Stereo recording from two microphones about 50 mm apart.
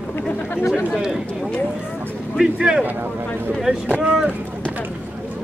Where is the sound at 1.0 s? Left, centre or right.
Centre.